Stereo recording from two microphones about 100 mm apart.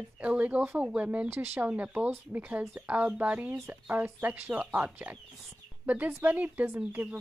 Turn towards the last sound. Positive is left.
turn(degrees=-15)  # may be behind; listen again after turning